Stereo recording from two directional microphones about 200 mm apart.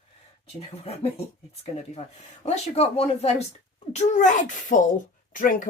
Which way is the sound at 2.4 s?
30° left (ahead or behind).